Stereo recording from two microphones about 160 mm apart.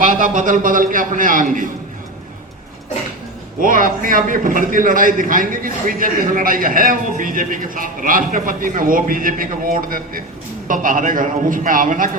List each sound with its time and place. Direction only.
0.0 s a man's voice: 55° right (ahead or behind)
3.6 s a man's voice: 60° right (ahead or behind)